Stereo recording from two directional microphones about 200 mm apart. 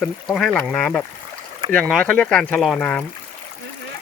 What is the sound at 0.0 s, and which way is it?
Speech, centre (ahead or behind).